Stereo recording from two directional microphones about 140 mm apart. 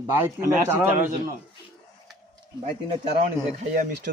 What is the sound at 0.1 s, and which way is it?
Speech, 15° right (ahead or behind).